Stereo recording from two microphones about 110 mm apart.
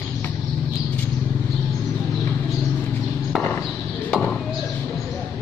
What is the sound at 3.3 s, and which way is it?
Basketball bounce, centre (ahead or behind).